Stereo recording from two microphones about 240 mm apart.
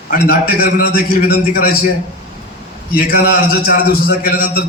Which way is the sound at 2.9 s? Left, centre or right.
Left.